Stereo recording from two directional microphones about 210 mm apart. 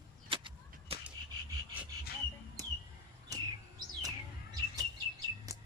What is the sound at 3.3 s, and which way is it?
Bird, 15° right (ahead or behind).